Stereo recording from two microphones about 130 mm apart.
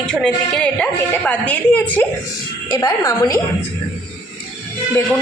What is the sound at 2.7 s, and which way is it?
Speech, 25° left (ahead or behind).